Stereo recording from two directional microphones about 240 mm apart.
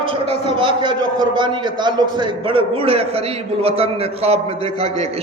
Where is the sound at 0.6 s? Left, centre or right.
Right.